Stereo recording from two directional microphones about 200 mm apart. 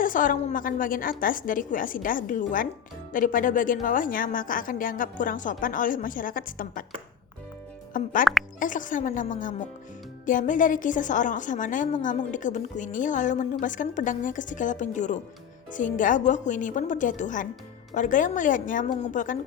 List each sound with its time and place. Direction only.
0.0 s a woman's voice: 40° left (ahead or behind)
7.9 s a woman's voice: 40° left (ahead or behind)